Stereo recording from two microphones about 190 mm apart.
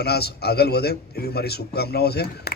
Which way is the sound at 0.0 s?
55° left (ahead or behind).